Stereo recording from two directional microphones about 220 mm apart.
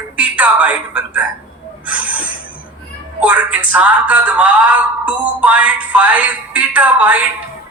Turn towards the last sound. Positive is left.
turn(degrees=-5)  # may be behind; listen again after turning